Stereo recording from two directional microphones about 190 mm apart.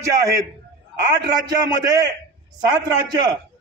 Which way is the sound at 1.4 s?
20° right (ahead or behind).